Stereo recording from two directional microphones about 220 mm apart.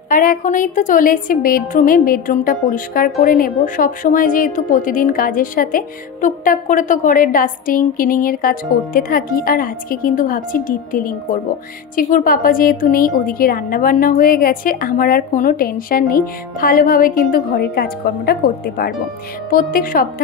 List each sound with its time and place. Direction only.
0.1 s a woman's voice: 40° left (ahead or behind)